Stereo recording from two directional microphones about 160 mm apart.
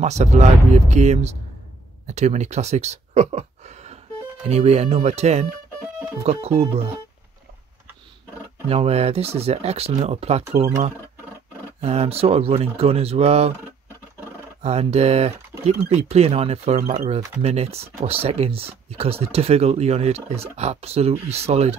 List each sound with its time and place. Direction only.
0.0 s speech: 45° right (ahead or behind)
8.6 s speech: 40° right (ahead or behind)
11.8 s speech: 40° right (ahead or behind)
14.6 s speech: 40° right (ahead or behind)